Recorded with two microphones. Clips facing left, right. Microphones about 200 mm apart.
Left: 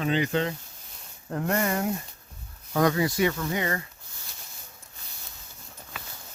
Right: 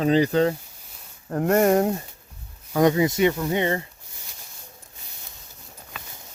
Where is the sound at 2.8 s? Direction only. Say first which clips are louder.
Right 5 dB; 20° right (ahead or behind).